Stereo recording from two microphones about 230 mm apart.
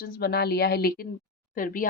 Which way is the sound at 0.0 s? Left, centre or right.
Left.